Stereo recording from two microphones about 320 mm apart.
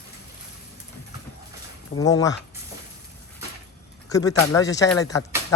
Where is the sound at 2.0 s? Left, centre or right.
Centre.